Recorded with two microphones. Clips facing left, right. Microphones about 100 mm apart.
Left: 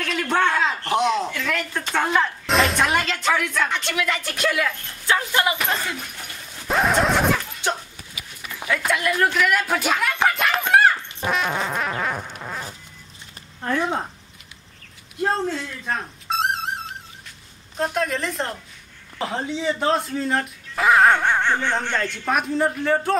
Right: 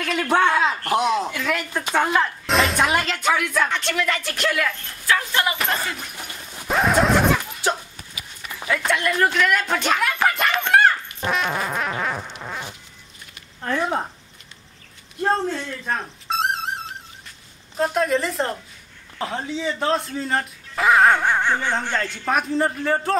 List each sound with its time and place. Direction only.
0.0 s a man's voice: 5° right (ahead or behind)
3.7 s speech: 5° left (ahead or behind)
5.0 s speech: 20° left (ahead or behind)
5.6 s speech: centre (ahead or behind)
8.6 s speech: centre (ahead or behind)
10.6 s a sound: 5° left (ahead or behind)
11.1 s music: centre (ahead or behind)
13.6 s speech: centre (ahead or behind)
15.2 s music: 5° right (ahead or behind)
17.7 s speech: centre (ahead or behind)